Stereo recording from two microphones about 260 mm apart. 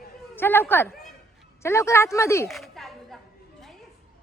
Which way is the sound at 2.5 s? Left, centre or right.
Centre.